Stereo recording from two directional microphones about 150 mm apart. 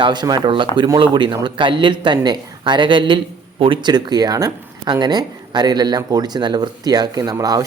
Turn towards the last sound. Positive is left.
turn(degrees=-25)  # may be behind; listen again after turning